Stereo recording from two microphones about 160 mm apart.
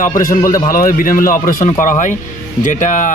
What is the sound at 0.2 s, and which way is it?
Speech, 60° left (ahead or behind).